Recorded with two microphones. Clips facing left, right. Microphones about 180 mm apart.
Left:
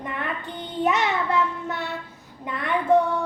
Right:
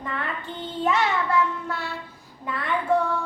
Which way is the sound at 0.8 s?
20° left (ahead or behind).